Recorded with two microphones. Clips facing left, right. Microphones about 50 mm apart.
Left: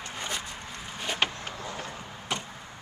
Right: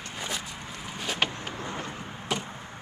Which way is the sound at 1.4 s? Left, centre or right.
Right.